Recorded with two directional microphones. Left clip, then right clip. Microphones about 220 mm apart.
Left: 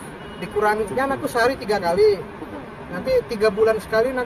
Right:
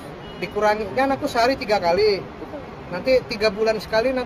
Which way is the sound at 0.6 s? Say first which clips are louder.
Right 1 dB; 20° right (ahead or behind).